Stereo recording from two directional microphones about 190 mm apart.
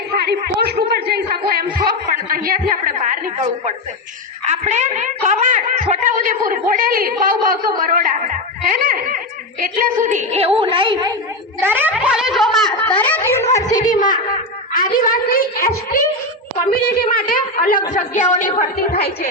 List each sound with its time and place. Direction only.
0.2 s a sound: 55° right (ahead or behind)
4.4 s a woman's voice: 40° right (ahead or behind)
11.6 s speech: 10° right (ahead or behind); by 13.7 s 15° left (ahead or behind)
13.9 s a woman's voice: 45° left (ahead or behind)
16.6 s a woman's voice: 50° left (ahead or behind)